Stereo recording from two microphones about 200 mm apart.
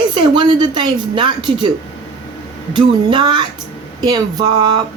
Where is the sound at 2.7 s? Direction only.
20° right (ahead or behind).